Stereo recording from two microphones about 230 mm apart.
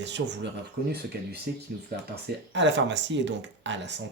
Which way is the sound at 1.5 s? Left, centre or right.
Right.